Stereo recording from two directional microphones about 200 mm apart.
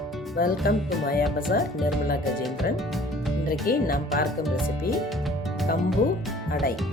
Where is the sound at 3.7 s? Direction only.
45° left (ahead or behind).